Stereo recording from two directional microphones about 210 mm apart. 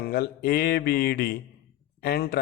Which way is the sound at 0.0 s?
50° left (ahead or behind).